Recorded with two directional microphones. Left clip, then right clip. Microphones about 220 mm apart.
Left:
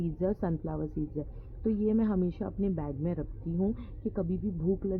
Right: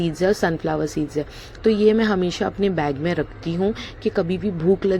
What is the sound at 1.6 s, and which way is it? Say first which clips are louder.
Speech: right 14 dB; 15° right (ahead or behind).